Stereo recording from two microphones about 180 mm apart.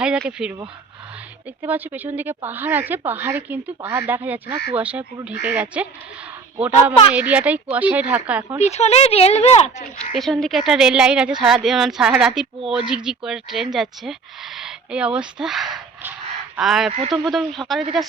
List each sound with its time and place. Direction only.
0.0 s speech: 5° right (ahead or behind)
1.6 s speech: 10° right (ahead or behind)
7.1 s speech: 10° right (ahead or behind)
8.6 s speech: 35° left (ahead or behind)
10.2 s speech: centre (ahead or behind)